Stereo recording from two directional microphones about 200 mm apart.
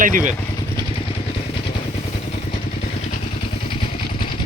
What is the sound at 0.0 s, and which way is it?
Speech, 40° right (ahead or behind).